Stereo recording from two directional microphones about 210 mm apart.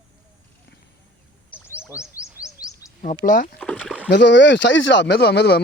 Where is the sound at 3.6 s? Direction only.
5° left (ahead or behind).